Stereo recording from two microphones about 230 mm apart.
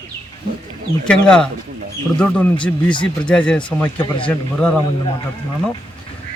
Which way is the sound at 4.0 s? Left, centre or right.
Left.